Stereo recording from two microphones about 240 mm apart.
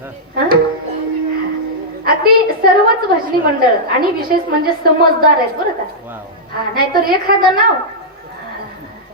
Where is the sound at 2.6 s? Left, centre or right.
Right.